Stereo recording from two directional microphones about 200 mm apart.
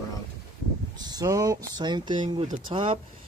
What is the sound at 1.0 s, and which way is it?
Speech, 20° right (ahead or behind).